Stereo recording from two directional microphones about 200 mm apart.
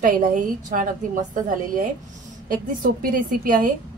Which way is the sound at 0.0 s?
45° right (ahead or behind).